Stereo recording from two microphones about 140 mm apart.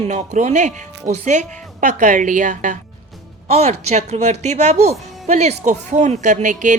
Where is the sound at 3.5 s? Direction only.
50° right (ahead or behind).